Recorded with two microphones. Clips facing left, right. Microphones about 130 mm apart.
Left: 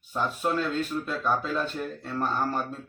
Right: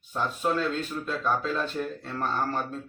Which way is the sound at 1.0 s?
5° left (ahead or behind).